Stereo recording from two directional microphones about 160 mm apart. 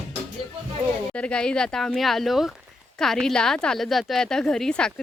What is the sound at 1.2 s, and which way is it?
A woman's voice, 5° left (ahead or behind).